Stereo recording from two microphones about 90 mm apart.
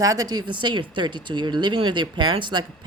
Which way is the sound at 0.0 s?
40° right (ahead or behind).